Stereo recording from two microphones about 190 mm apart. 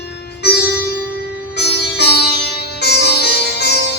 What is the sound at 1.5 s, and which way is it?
Music, 60° left (ahead or behind).